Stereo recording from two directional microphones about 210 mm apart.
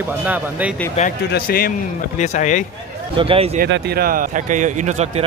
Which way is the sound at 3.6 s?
45° right (ahead or behind).